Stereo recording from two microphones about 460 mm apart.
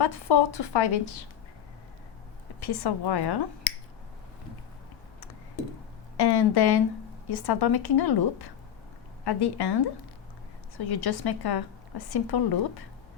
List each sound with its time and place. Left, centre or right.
0.0 s a woman's voice: left
2.6 s a woman's voice: left
6.1 s a woman's voice: left